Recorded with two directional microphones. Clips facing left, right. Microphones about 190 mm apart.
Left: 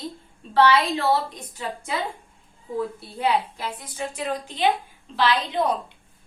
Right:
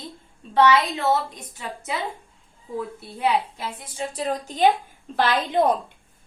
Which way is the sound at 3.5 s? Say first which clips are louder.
Even; 30° right (ahead or behind).